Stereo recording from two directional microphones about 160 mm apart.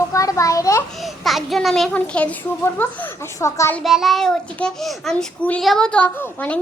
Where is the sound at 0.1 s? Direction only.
20° left (ahead or behind).